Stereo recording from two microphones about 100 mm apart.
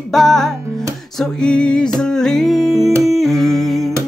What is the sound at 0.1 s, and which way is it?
Music, 5° left (ahead or behind).